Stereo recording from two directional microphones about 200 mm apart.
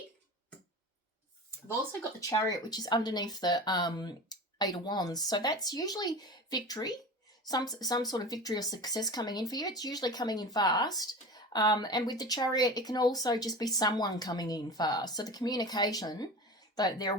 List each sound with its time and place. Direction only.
2.2 s speech: 15° left (ahead or behind)